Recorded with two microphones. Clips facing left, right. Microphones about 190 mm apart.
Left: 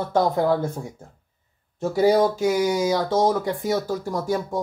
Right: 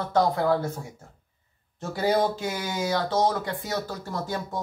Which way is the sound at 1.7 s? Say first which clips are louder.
Left 6 dB; 15° left (ahead or behind).